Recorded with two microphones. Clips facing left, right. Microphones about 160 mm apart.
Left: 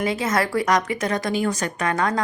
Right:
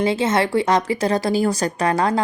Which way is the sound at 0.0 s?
30° right (ahead or behind).